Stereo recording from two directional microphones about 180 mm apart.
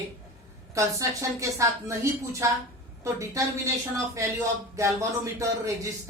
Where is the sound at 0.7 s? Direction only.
15° right (ahead or behind).